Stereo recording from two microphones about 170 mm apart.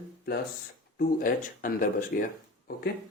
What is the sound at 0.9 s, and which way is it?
Speech, 55° left (ahead or behind).